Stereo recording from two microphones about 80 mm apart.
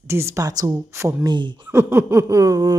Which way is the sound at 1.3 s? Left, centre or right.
Right.